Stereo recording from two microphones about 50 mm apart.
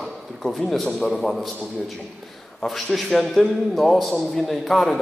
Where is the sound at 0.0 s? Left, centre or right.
Centre.